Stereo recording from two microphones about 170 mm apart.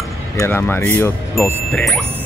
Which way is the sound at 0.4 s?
15° left (ahead or behind).